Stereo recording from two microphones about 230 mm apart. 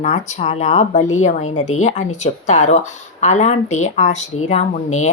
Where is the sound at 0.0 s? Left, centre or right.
Left.